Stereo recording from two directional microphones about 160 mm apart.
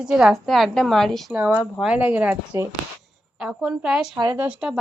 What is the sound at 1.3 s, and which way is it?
A woman's voice, 10° right (ahead or behind).